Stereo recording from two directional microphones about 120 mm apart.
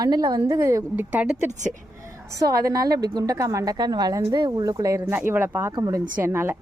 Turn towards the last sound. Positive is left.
turn(degrees=-20)  # may be behind; listen again after turning